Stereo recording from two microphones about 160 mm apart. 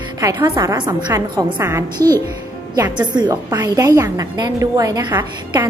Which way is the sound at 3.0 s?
25° right (ahead or behind).